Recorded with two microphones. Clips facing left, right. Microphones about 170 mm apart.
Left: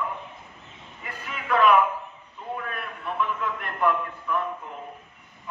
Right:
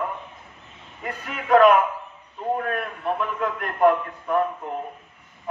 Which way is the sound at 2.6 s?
50° right (ahead or behind).